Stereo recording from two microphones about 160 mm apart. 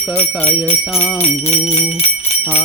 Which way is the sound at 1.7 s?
40° left (ahead or behind).